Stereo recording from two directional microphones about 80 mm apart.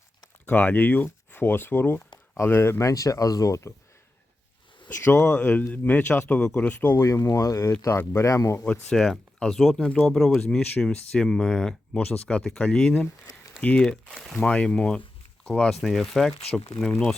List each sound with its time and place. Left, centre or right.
0.4 s speech: left
5.2 s speech: centre
6.9 s speech: left
7.3 s speech: left
8.9 s speech: centre
13.9 s speech: centre
15.8 s speech: centre